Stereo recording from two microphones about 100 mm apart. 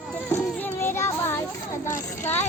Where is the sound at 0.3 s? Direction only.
20° left (ahead or behind).